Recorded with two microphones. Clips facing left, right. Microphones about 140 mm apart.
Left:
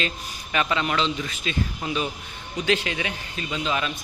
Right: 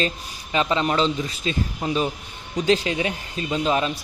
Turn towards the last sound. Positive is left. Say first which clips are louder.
# right 5 dB
turn(degrees=-35)  # may be behind; listen again after turning